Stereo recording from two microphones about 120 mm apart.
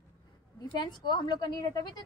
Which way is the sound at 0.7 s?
40° left (ahead or behind).